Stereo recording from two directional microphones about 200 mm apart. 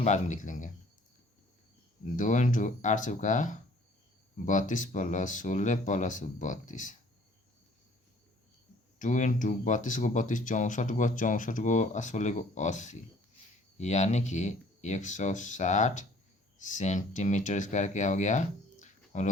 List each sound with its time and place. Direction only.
0.0 s speech: 35° left (ahead or behind)
2.1 s speech: 40° left (ahead or behind)
9.0 s speech: 40° left (ahead or behind)